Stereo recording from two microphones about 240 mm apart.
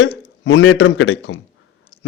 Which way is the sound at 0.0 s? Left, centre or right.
Left.